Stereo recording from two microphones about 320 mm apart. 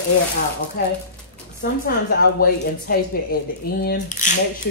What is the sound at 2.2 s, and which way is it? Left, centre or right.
Speech, left.